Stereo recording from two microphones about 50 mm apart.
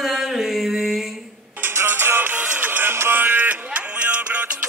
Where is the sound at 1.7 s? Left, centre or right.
Right.